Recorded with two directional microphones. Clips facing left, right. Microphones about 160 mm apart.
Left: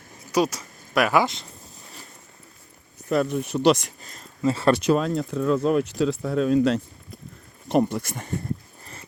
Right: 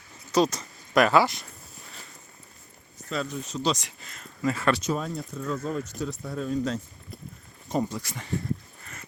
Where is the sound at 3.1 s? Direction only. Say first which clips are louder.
Left 8 dB; 60° left (ahead or behind).